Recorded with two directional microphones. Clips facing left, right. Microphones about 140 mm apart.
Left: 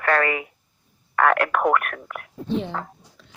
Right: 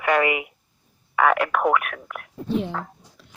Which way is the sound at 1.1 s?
5° right (ahead or behind).